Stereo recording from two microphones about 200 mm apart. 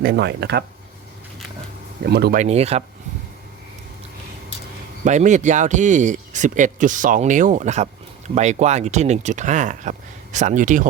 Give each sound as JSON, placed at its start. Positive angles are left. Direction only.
{"t": 0.0, "sound": "speech", "side_deg": -55}
{"t": 2.0, "sound": "speech", "side_deg": -55}
{"t": 2.4, "sound": "speech", "side_deg": -30}
{"t": 5.0, "sound": "speech", "side_deg": -35}